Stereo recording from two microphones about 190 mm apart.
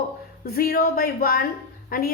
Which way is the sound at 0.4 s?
50° left (ahead or behind).